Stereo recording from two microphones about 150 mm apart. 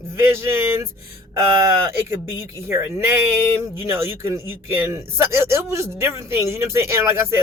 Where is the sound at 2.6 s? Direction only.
20° right (ahead or behind).